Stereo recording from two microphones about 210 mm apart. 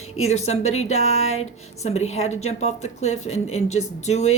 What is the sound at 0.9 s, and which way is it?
Speech, 30° left (ahead or behind).